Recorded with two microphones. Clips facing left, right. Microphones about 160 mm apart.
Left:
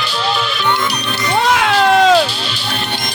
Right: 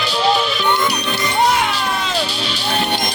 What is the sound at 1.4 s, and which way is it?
Music, 90° left.